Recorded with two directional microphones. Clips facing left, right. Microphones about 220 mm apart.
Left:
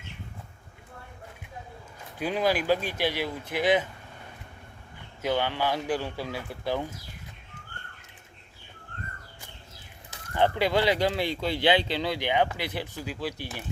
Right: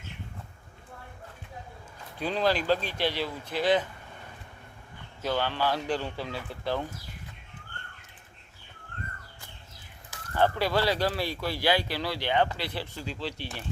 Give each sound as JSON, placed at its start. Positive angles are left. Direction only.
{"t": 2.1, "sound": "speech", "side_deg": 10}
{"t": 5.2, "sound": "speech", "side_deg": 15}
{"t": 10.1, "sound": "speech", "side_deg": 20}